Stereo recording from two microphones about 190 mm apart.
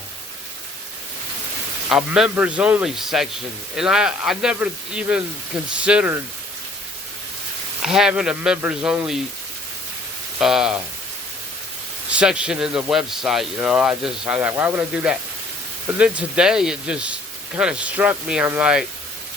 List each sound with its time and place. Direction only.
1.9 s speech: 5° right (ahead or behind)
7.9 s speech: 5° right (ahead or behind)
10.4 s speech: 5° right (ahead or behind)
12.1 s speech: 5° right (ahead or behind)